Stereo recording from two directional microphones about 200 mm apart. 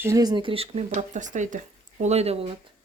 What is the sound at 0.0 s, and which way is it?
Speech, 15° right (ahead or behind).